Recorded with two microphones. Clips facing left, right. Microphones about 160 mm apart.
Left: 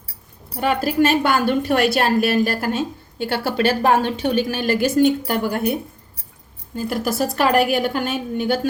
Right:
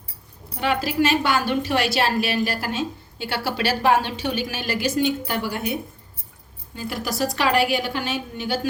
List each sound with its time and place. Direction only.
0.6 s a woman's voice: 50° left (ahead or behind)
6.7 s a woman's voice: 45° left (ahead or behind)